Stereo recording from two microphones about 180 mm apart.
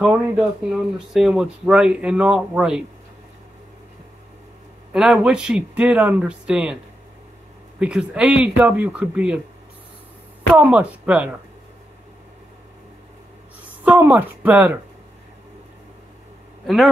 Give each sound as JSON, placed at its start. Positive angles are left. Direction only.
{"t": 0.0, "sound": "speech", "side_deg": -5}
{"t": 4.9, "sound": "speech", "side_deg": -5}
{"t": 7.8, "sound": "speech", "side_deg": -5}
{"t": 10.5, "sound": "speech", "side_deg": -5}
{"t": 13.8, "sound": "speech", "side_deg": -10}
{"t": 16.6, "sound": "speech", "side_deg": 0}